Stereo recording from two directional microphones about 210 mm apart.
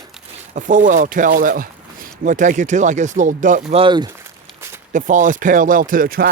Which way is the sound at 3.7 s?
25° right (ahead or behind).